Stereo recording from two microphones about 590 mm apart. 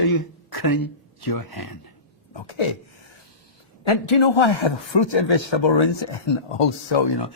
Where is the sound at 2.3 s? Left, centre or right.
Left.